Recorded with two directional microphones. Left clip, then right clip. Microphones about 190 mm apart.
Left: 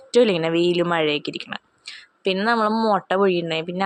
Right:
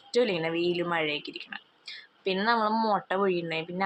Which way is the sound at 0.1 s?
35° left (ahead or behind).